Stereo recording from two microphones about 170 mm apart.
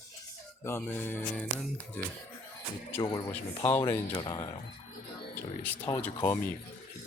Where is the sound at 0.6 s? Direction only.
15° left (ahead or behind).